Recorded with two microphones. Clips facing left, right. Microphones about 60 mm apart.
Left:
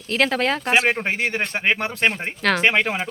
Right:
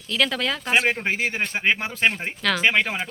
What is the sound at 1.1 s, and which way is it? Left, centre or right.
Speech, centre.